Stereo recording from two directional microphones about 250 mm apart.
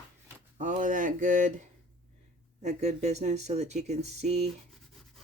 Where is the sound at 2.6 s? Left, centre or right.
Right.